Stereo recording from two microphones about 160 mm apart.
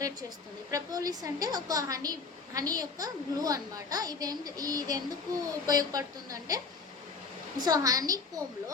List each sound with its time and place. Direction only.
0.7 s a woman's voice: 20° right (ahead or behind)
7.6 s a woman's voice: 20° right (ahead or behind)